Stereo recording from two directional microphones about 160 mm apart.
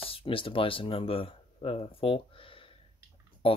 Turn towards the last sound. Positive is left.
turn(degrees=35)  # may be behind; listen again after turning